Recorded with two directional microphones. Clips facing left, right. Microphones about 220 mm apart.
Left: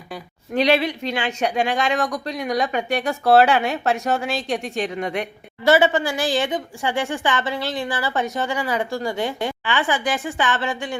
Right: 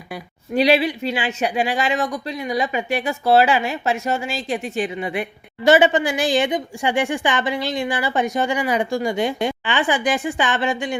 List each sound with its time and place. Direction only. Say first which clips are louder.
0.1 s speech: right 2 dB; 10° right (ahead or behind)
5.6 s a woman's voice: right 2 dB; 15° right (ahead or behind)